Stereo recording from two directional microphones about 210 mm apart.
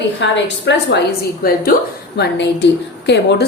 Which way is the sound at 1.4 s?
45° left (ahead or behind).